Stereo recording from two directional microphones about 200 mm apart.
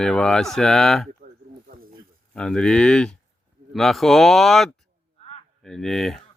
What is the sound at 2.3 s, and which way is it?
Speech, 5° left (ahead or behind).